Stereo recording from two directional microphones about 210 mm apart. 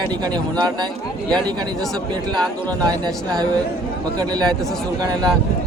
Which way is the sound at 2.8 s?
20° right (ahead or behind).